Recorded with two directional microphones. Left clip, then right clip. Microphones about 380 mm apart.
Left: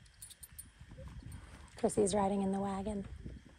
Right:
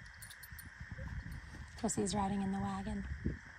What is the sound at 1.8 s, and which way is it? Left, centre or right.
A woman's voice, centre.